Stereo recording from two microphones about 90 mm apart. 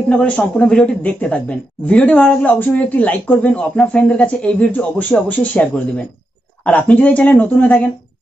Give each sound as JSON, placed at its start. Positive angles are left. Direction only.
{"t": 0.6, "sound": "a woman's voice", "side_deg": 15}